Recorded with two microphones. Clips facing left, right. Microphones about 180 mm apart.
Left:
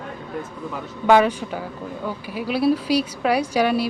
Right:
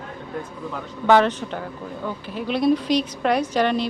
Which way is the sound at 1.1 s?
10° left (ahead or behind).